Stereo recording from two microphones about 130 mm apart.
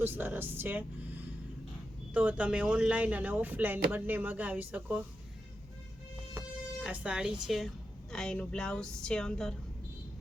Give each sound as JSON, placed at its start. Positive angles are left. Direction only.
{"t": 0.0, "sound": "speech", "side_deg": -15}
{"t": 6.4, "sound": "music", "side_deg": -20}
{"t": 6.8, "sound": "a woman's voice", "side_deg": -10}